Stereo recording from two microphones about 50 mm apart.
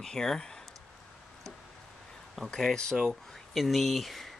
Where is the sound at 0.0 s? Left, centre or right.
Centre.